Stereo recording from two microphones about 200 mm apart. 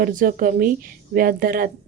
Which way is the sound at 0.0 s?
40° right (ahead or behind).